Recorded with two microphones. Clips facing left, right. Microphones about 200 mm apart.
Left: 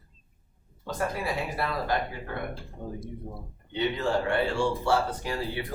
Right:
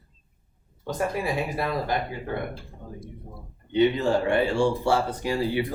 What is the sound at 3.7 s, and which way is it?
Speech, 15° right (ahead or behind).